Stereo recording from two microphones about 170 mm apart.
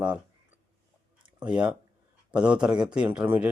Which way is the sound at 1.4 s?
5° right (ahead or behind).